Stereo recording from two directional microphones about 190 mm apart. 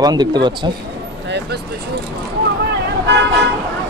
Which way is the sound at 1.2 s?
65° right (ahead or behind).